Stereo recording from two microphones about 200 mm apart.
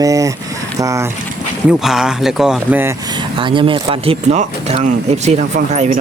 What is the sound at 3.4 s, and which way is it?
Speech, 25° right (ahead or behind).